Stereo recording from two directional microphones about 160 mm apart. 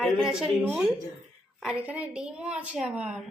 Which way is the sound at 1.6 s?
5° right (ahead or behind).